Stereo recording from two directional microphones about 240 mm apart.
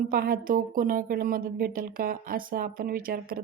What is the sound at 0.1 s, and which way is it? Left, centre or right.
A woman's voice, right.